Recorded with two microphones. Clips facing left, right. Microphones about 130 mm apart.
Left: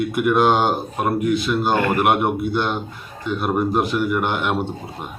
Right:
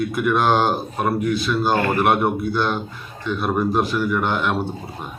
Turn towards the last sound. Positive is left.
turn(degrees=15)  # may be behind; listen again after turning